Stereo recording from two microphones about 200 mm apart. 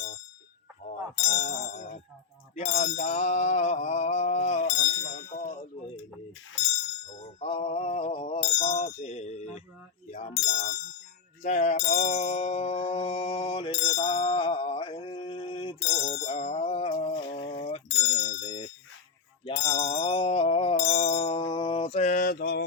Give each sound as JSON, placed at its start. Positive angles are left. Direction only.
{"t": 0.9, "sound": "a sound", "side_deg": 35}
{"t": 2.6, "sound": "mantra", "side_deg": 35}
{"t": 5.1, "sound": "ding", "side_deg": 40}
{"t": 7.2, "sound": "a sound", "side_deg": 30}
{"t": 10.1, "sound": "mantra", "side_deg": 35}
{"t": 17.6, "sound": "bicycle bell", "side_deg": 30}
{"t": 19.7, "sound": "music", "side_deg": 30}